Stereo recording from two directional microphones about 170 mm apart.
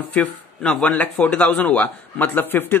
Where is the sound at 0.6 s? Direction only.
5° left (ahead or behind).